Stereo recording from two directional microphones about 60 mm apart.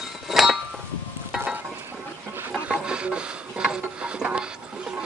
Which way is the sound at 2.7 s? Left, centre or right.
Centre.